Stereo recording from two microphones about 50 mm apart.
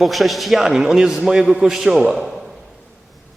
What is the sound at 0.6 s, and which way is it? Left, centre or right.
A man's voice, centre.